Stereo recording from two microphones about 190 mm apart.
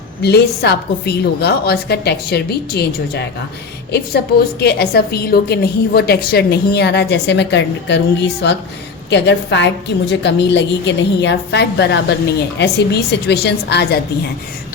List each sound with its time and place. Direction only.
0.2 s a woman's voice: 60° left (ahead or behind)
4.6 s a woman's voice: 55° left (ahead or behind)